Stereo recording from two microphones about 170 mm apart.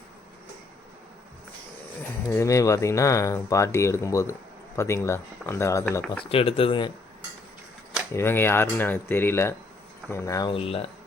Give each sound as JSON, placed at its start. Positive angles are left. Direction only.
{"t": 2.3, "sound": "speech", "side_deg": 15}
{"t": 6.2, "sound": "speech", "side_deg": 35}
{"t": 8.1, "sound": "speech", "side_deg": 15}
{"t": 10.5, "sound": "speech", "side_deg": 35}